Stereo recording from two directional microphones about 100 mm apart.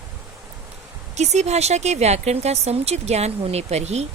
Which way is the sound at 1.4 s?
90° right.